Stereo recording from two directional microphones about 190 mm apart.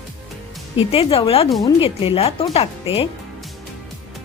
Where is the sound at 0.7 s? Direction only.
30° left (ahead or behind).